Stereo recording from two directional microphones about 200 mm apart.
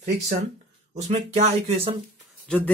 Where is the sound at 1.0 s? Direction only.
35° right (ahead or behind).